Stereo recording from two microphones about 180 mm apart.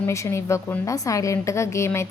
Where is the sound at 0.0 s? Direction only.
15° left (ahead or behind).